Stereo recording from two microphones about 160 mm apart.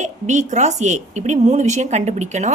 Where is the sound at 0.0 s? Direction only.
50° right (ahead or behind).